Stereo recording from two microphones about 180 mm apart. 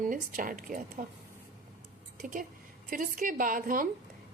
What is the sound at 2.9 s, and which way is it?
Speech, 50° right (ahead or behind).